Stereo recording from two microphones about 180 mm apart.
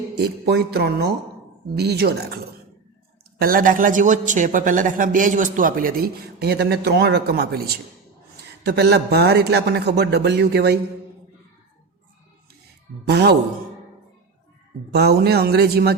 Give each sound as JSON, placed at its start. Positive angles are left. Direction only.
{"t": 0.2, "sound": "a man's voice", "side_deg": -65}
{"t": 3.3, "sound": "a man's voice", "side_deg": -55}
{"t": 13.1, "sound": "a man's voice", "side_deg": -65}
{"t": 14.9, "sound": "a man's voice", "side_deg": -65}